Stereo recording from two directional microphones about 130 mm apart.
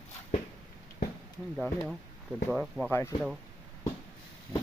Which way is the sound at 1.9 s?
5° right (ahead or behind).